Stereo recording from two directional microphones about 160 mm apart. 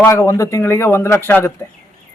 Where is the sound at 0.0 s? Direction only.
15° left (ahead or behind).